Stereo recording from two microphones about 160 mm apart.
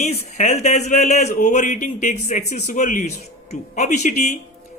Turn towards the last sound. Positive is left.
turn(degrees=45)  # may be behind; listen again after turning